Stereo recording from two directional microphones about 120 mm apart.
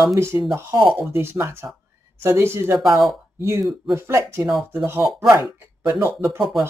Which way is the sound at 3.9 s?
20° right (ahead or behind).